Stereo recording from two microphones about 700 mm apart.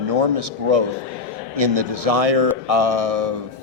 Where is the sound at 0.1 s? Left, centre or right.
Right.